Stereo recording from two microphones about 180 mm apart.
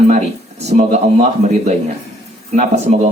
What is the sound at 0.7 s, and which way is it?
Speech, 40° right (ahead or behind).